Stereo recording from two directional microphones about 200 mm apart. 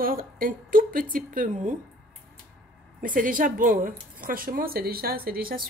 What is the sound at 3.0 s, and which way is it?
A woman's voice, 40° right (ahead or behind).